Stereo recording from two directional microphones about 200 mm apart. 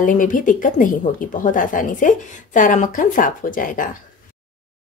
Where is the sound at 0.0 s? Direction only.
40° left (ahead or behind).